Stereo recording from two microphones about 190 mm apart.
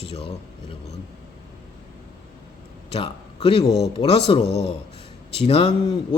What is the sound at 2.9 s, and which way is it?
A man's voice, 30° left (ahead or behind).